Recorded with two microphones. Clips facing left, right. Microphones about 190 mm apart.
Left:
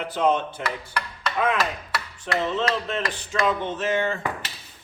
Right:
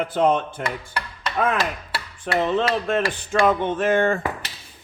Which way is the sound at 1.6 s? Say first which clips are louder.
Right 1 dB; 30° right (ahead or behind).